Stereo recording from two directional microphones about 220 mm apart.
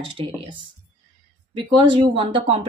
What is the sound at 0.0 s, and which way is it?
A woman's voice, 25° right (ahead or behind).